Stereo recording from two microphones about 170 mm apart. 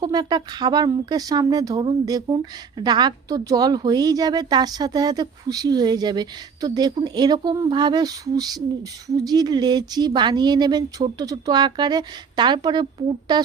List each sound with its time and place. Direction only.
0.0 s speech: 25° right (ahead or behind)